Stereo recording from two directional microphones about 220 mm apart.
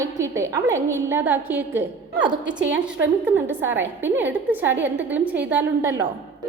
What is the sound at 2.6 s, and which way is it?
Speech, 55° right (ahead or behind).